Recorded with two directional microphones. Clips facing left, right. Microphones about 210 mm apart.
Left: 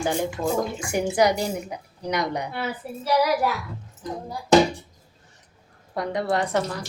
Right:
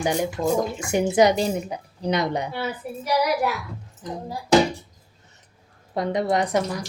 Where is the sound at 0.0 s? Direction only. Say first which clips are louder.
Right 2 dB; 15° right (ahead or behind).